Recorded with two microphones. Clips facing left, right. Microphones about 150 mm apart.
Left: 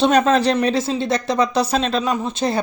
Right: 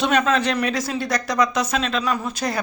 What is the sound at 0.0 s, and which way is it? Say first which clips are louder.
Speech: left 4 dB; 35° left (ahead or behind).